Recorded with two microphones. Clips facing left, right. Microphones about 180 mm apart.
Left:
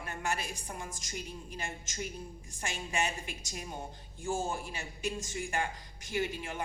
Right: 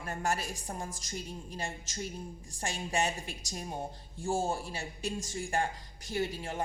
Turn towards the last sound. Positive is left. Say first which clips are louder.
# right 1 dB
turn(degrees=-35)  # may be behind; listen again after turning